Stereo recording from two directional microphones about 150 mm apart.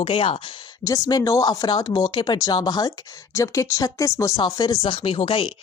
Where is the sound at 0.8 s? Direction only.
20° left (ahead or behind).